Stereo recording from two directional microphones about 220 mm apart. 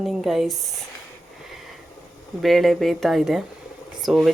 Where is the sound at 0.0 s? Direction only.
Centre (ahead or behind).